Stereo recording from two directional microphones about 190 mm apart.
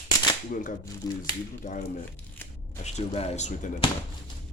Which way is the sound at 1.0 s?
20° left (ahead or behind).